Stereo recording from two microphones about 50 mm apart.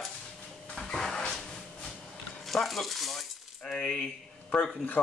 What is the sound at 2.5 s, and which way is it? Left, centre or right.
Speech, centre.